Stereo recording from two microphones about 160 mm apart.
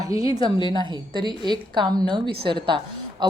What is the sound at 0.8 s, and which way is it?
A woman's voice, 30° right (ahead or behind).